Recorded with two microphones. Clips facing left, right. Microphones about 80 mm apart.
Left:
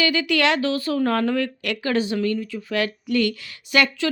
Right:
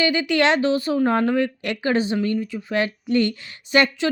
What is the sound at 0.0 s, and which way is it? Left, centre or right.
Speech, right.